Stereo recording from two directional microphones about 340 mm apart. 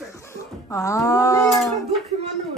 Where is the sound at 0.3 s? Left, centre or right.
Centre.